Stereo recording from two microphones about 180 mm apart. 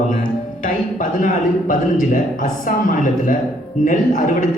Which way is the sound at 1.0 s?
45° left (ahead or behind).